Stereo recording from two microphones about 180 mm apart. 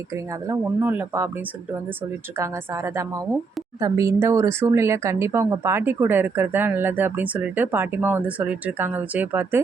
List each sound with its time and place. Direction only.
0.4 s speech: 15° right (ahead or behind)
2.4 s speech: 15° right (ahead or behind)